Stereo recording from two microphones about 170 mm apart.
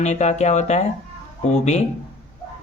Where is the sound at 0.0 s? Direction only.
45° left (ahead or behind).